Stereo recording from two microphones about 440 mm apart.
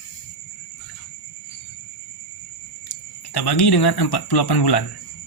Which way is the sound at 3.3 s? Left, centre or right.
Left.